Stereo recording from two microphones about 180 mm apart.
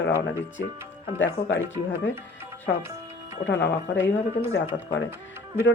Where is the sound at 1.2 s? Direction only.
90° left.